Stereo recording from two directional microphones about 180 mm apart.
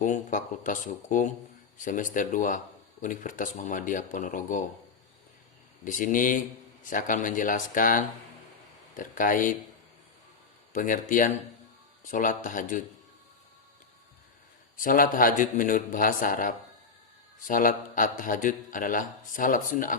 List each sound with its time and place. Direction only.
0.0 s a man's voice: 45° left (ahead or behind)
5.8 s a man's voice: 45° left (ahead or behind)
10.7 s a man's voice: 45° left (ahead or behind)
14.8 s a man's voice: 50° left (ahead or behind)